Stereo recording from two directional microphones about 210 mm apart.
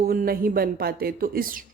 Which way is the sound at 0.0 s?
45° right (ahead or behind).